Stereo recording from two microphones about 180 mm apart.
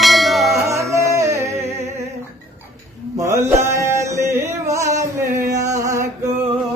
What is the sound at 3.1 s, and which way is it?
Music, 15° right (ahead or behind).